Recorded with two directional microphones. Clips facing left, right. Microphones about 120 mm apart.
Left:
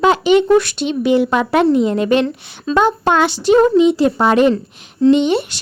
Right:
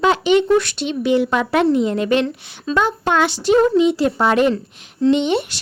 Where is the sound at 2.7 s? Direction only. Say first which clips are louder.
Left 4 dB; 20° left (ahead or behind).